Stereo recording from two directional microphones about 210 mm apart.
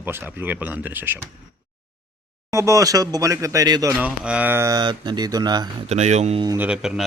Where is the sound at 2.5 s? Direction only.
15° right (ahead or behind).